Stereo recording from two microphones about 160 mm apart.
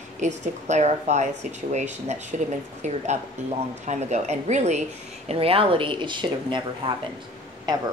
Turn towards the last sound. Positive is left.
turn(degrees=-25)  # may be behind; listen again after turning